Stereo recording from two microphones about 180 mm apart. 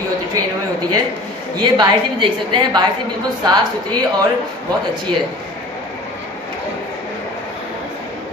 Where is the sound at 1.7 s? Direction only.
25° right (ahead or behind).